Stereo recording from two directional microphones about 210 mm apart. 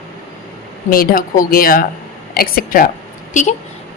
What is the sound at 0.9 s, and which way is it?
Speech, 40° left (ahead or behind).